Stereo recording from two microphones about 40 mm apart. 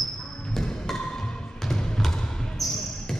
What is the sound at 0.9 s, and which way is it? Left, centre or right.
Music, centre.